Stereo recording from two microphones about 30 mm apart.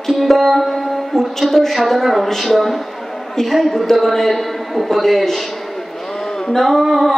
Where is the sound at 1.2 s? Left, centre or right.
Centre.